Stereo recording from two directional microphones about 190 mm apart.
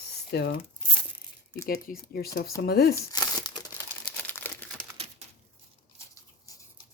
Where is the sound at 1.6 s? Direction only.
50° left (ahead or behind).